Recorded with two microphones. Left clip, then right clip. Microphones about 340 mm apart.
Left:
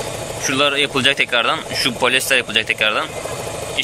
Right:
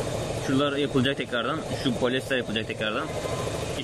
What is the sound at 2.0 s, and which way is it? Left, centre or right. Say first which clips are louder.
Speech: left 11 dB; left.